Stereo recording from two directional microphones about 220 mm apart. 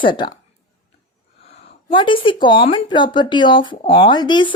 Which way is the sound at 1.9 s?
20° left (ahead or behind).